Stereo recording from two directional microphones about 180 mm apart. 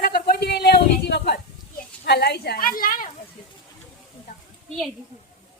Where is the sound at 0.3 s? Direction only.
60° left (ahead or behind).